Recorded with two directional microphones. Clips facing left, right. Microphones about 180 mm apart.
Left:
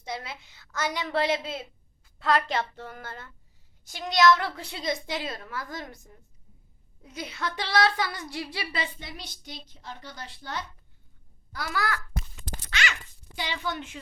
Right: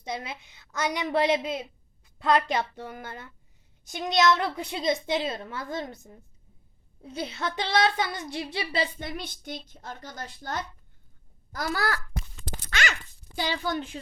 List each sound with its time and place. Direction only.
0.0 s a woman's voice: 20° right (ahead or behind)
9.0 s a child's voice: 55° right (ahead or behind); by 11.9 s 35° right (ahead or behind)
12.7 s a sound: 40° right (ahead or behind)